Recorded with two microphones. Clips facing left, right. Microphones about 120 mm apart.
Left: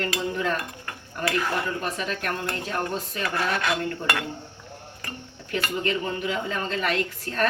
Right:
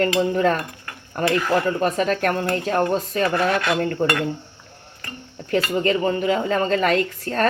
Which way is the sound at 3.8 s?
50° right (ahead or behind).